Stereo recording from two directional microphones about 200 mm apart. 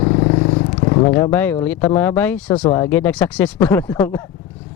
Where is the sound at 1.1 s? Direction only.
10° left (ahead or behind).